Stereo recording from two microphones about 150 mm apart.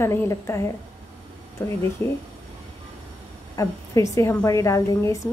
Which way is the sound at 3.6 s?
20° left (ahead or behind).